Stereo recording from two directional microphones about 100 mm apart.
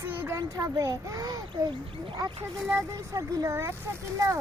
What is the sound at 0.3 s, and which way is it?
Speech, 35° right (ahead or behind).